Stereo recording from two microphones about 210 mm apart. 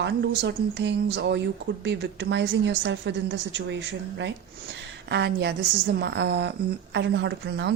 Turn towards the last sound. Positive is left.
turn(degrees=-60)  # may be behind; listen again after turning